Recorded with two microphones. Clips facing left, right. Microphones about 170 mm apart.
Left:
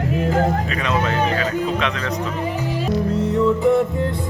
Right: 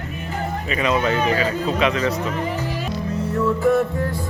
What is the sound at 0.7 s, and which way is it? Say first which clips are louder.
Speech: right 1 dB; 5° right (ahead or behind).